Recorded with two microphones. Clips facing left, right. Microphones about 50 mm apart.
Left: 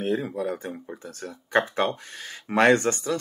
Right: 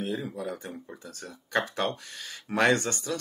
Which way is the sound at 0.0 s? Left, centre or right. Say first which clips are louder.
Left 6 dB; left.